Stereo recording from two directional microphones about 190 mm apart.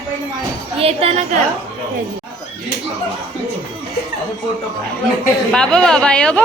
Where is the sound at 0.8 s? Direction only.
30° right (ahead or behind).